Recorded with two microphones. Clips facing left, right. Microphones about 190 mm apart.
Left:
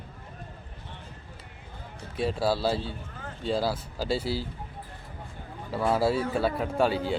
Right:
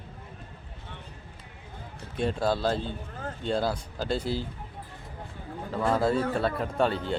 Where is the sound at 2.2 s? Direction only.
5° left (ahead or behind).